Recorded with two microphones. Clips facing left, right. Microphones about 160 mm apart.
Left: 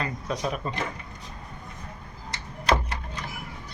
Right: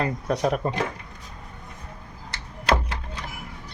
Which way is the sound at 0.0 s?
55° right (ahead or behind).